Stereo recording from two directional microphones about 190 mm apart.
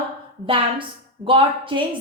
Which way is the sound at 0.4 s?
25° right (ahead or behind).